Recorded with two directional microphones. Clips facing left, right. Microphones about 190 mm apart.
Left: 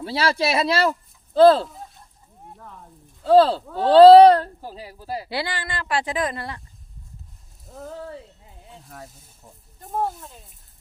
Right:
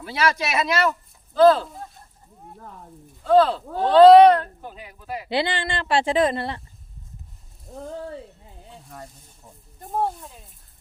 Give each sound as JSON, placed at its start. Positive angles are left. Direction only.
{"t": 0.0, "sound": "speech", "side_deg": 30}
{"t": 3.2, "sound": "speech", "side_deg": 30}
{"t": 5.3, "sound": "speech", "side_deg": -25}
{"t": 9.9, "sound": "speech", "side_deg": 0}